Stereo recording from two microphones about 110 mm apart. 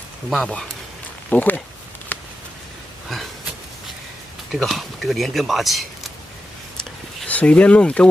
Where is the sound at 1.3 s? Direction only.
15° left (ahead or behind).